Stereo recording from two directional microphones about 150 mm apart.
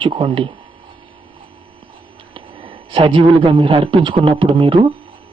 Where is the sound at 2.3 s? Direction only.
35° right (ahead or behind).